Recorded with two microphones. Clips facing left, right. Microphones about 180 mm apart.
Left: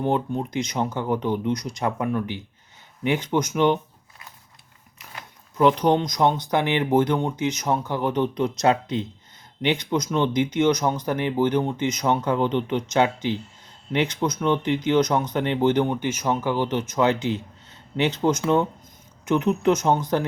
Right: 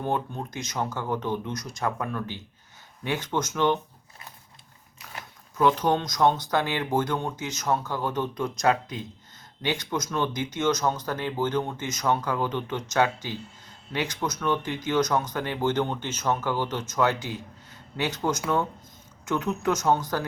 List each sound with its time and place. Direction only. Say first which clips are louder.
0.0 s speech: left 5 dB; 20° left (ahead or behind)
5.5 s speech: left 4 dB; 20° left (ahead or behind)